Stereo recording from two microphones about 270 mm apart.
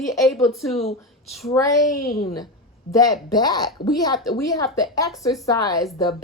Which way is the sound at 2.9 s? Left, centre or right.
Centre.